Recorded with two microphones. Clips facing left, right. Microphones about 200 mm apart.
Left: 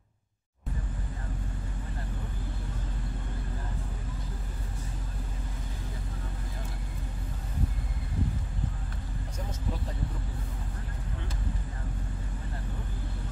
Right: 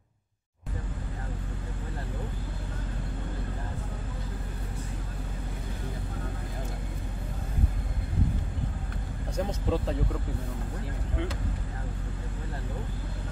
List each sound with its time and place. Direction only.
9.4 s vehicle: 80° right